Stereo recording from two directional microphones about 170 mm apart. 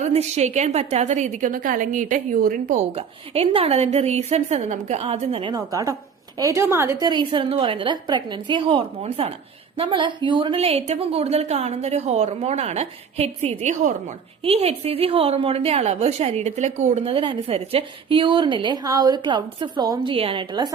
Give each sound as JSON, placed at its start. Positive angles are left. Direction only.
{"t": 0.0, "sound": "a woman's voice", "side_deg": -40}
{"t": 2.9, "sound": "a woman's voice", "side_deg": -35}
{"t": 5.5, "sound": "a woman's voice", "side_deg": -20}